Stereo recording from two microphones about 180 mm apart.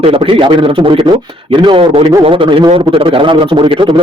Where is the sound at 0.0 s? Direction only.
30° right (ahead or behind).